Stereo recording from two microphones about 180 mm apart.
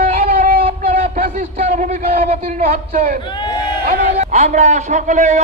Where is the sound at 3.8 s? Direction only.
40° right (ahead or behind).